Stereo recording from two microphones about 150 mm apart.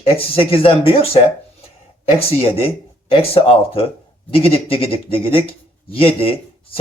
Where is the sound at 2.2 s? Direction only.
40° left (ahead or behind).